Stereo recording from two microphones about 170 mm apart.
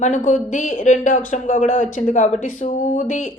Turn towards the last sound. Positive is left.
turn(degrees=50)  # may be behind; listen again after turning